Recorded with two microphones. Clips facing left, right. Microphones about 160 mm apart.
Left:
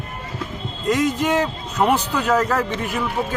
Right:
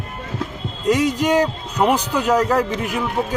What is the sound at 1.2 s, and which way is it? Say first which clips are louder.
Speech: right 3 dB; 10° right (ahead or behind).